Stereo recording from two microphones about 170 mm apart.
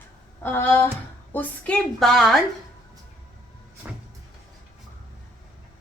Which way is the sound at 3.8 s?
10° right (ahead or behind).